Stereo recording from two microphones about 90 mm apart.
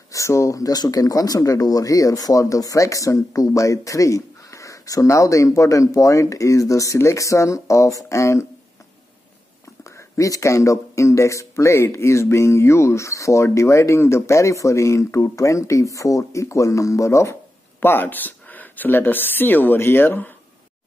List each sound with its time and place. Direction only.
0.1 s speech: 35° left (ahead or behind)
9.8 s speech: 35° left (ahead or behind)